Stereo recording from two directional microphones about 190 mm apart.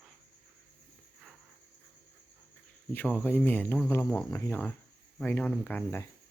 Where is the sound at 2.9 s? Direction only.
10° left (ahead or behind).